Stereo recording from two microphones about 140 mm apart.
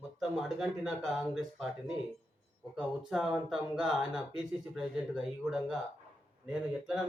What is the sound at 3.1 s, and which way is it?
Speech, 5° right (ahead or behind).